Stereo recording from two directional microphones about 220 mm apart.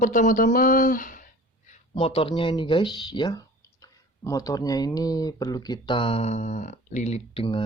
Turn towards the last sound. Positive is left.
turn(degrees=25)  # may be behind; listen again after turning